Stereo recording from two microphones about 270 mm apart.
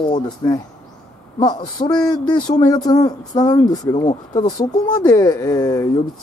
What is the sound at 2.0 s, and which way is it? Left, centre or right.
Speech, centre.